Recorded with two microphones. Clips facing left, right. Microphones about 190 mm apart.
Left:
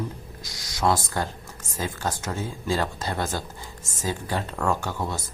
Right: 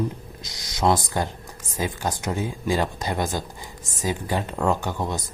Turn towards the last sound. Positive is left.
turn(degrees=-20)  # may be behind; listen again after turning